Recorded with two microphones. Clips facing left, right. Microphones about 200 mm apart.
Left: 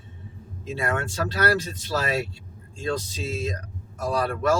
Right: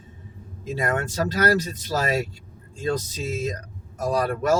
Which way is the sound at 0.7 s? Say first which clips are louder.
Right 2 dB; 40° right (ahead or behind).